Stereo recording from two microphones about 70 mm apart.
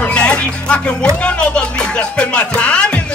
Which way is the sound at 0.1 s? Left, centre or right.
Centre.